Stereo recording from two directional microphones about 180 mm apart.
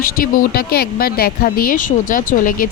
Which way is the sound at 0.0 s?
50° left (ahead or behind).